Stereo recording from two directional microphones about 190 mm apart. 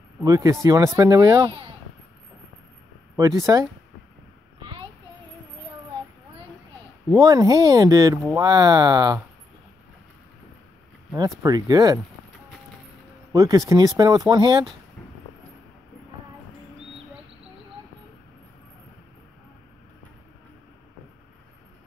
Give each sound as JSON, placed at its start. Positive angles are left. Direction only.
{"t": 0.2, "sound": "speech", "side_deg": -15}
{"t": 3.2, "sound": "speech", "side_deg": -15}
{"t": 7.2, "sound": "speech", "side_deg": -20}
{"t": 11.1, "sound": "speech", "side_deg": -20}
{"t": 13.3, "sound": "speech", "side_deg": -20}